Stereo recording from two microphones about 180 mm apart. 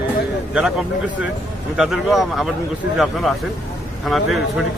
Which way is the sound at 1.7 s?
5° right (ahead or behind).